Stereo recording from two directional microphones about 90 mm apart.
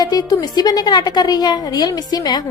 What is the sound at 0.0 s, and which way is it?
A woman's voice, 45° left (ahead or behind).